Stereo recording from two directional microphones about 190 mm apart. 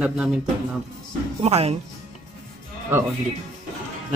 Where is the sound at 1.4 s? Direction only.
35° right (ahead or behind).